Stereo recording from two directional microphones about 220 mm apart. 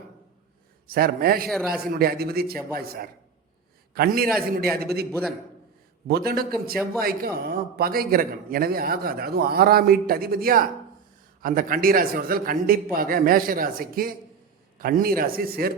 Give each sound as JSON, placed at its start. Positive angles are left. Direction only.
{"t": 0.9, "sound": "a man's voice", "side_deg": -40}
{"t": 6.1, "sound": "a man's voice", "side_deg": -45}